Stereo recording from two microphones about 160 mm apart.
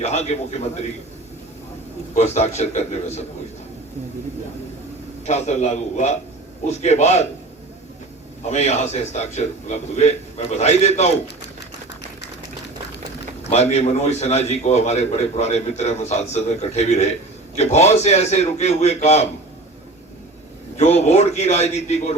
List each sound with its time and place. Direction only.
0.0 s a man's voice: 45° left (ahead or behind)
2.1 s a man's voice: 45° left (ahead or behind)
5.2 s a man's voice: 45° left (ahead or behind)
8.4 s a man's voice: 45° left (ahead or behind)
13.5 s a man's voice: 45° left (ahead or behind)
20.7 s a man's voice: 45° left (ahead or behind)